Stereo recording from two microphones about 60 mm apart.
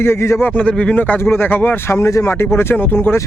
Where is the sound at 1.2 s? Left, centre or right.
Left.